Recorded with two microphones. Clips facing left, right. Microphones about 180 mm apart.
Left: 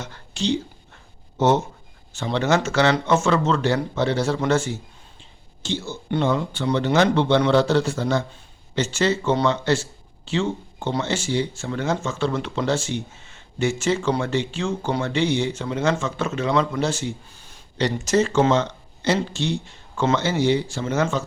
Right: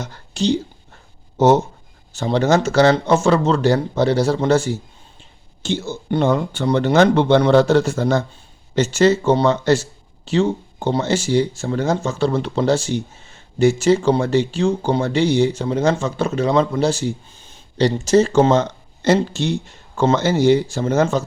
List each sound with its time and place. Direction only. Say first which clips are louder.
0.0 s speech: right 5 dB; 40° right (ahead or behind)
5.6 s speech: right 5 dB; 45° right (ahead or behind)